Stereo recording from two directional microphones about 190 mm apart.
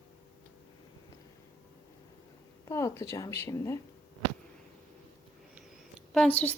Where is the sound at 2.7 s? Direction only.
15° left (ahead or behind).